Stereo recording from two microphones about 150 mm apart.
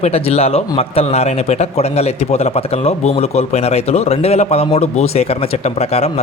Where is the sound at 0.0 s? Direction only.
45° left (ahead or behind).